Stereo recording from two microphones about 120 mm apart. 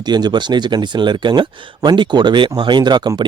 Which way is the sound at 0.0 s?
35° right (ahead or behind).